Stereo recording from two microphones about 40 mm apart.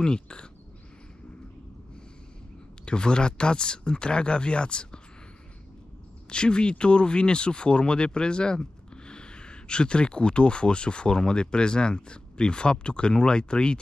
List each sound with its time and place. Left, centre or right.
0.0 s speech: left
2.8 s speech: left
6.3 s speech: left